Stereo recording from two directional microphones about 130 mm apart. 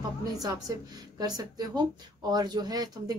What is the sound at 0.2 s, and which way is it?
A woman's voice, 30° right (ahead or behind).